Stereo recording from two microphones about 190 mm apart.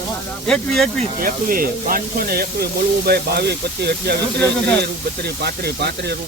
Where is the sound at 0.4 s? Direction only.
Centre (ahead or behind).